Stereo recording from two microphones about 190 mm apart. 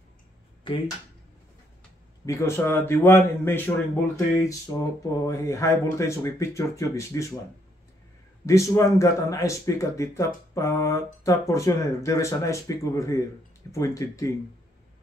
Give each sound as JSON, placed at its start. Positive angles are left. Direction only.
{"t": 2.2, "sound": "speech", "side_deg": 15}
{"t": 8.5, "sound": "speech", "side_deg": 15}